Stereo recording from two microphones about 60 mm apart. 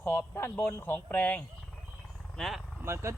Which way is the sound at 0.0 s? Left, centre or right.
Left.